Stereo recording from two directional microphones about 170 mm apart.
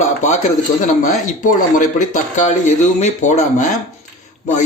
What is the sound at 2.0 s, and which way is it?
A man's voice, 45° left (ahead or behind).